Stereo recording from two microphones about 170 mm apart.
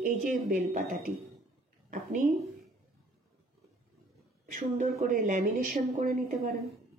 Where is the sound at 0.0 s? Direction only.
50° right (ahead or behind).